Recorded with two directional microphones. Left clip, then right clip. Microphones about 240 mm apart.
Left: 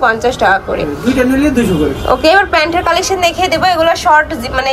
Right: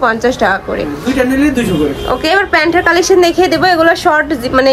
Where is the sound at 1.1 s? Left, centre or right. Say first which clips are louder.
Even; centre.